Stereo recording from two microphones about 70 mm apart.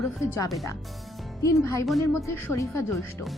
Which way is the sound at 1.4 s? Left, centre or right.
Left.